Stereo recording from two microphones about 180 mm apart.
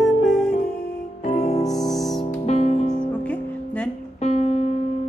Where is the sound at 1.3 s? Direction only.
40° left (ahead or behind).